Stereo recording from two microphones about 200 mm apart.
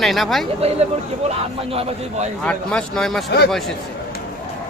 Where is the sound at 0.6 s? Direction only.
30° right (ahead or behind).